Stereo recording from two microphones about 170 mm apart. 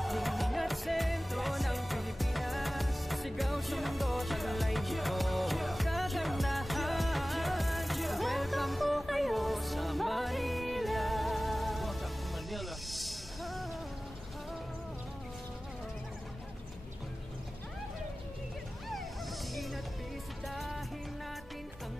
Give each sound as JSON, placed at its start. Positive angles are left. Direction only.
{"t": 0.0, "sound": "music", "side_deg": 0}
{"t": 19.5, "sound": "music", "side_deg": 0}